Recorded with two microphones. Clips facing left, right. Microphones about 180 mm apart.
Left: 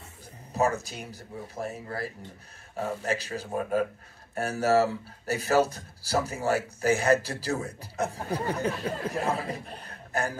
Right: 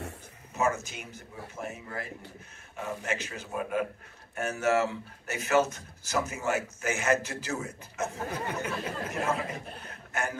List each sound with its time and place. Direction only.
0.6 s speech: 35° left (ahead or behind)